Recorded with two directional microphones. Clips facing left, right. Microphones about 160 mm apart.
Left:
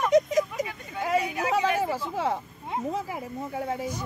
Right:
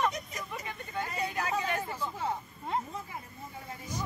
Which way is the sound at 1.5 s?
90° left.